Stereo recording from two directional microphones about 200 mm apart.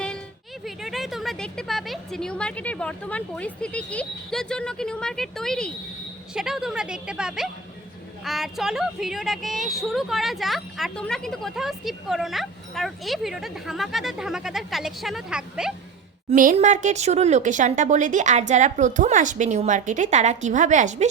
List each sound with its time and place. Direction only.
0.6 s a woman's voice: centre (ahead or behind)
16.3 s speech: 40° right (ahead or behind)